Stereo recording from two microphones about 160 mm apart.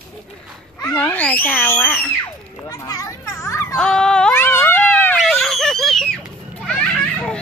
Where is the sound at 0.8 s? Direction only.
10° left (ahead or behind).